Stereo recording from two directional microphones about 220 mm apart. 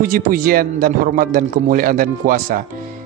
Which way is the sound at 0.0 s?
40° right (ahead or behind).